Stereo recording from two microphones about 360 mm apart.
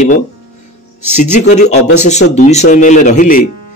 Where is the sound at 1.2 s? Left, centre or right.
Centre.